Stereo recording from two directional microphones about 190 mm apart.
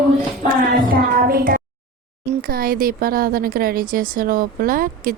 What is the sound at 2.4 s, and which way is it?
A woman's voice, 50° right (ahead or behind).